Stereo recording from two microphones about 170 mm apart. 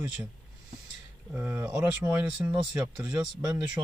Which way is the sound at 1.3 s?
10° right (ahead or behind).